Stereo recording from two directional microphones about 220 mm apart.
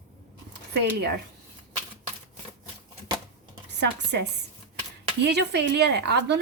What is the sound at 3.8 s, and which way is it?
A woman's voice, 50° right (ahead or behind).